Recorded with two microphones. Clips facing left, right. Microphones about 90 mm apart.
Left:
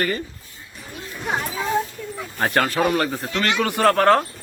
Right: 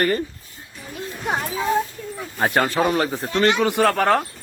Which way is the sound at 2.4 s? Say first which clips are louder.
Right 1 dB; 10° right (ahead or behind).